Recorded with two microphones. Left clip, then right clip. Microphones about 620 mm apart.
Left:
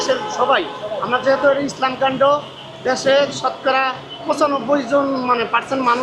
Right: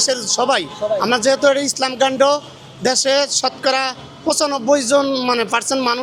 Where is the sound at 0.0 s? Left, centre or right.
Right.